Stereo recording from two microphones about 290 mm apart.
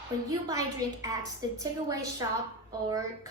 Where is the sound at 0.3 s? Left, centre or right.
Centre.